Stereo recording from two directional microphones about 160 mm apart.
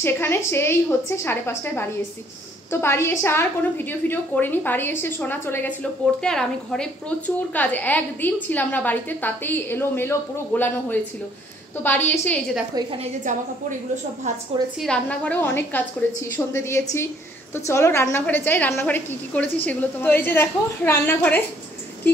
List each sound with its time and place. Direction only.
0.0 s a woman's voice: 15° left (ahead or behind)
12.7 s a woman's voice: 35° right (ahead or behind)
14.8 s a woman's voice: 5° left (ahead or behind)